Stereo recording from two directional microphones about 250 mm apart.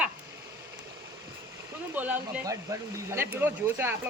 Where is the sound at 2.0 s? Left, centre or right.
Centre.